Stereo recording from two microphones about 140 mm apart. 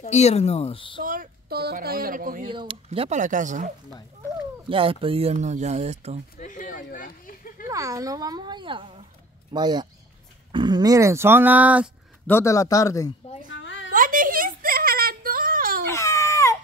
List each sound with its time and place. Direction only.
0.0 s speech: 50° left (ahead or behind)
1.0 s a woman's voice: 75° right (ahead or behind)
2.5 s speech: 35° right (ahead or behind)
3.2 s speech: 65° right (ahead or behind)
4.6 s speech: 40° right (ahead or behind)
6.3 s a sound: 70° left (ahead or behind); by 7.6 s 85° left
7.6 s speech: 25° right (ahead or behind)
12.3 s speech: 20° left (ahead or behind)
13.9 s a sound: 75° right (ahead or behind)
15.9 s baby cry: 20° left (ahead or behind)